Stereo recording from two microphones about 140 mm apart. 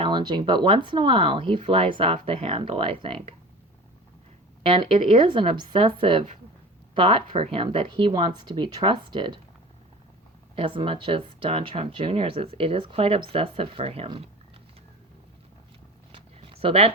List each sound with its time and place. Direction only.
0.0 s speech: 35° right (ahead or behind)
4.6 s speech: 40° right (ahead or behind)
10.5 s speech: 40° right (ahead or behind)
16.1 s a sound: 45° right (ahead or behind)